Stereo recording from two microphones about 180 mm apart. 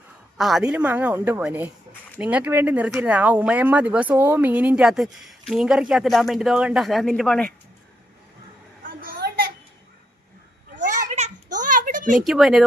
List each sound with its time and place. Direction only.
0.3 s speech: centre (ahead or behind)
8.8 s a sound: 55° right (ahead or behind)
10.8 s children playing: 45° right (ahead or behind)
12.2 s speech: centre (ahead or behind)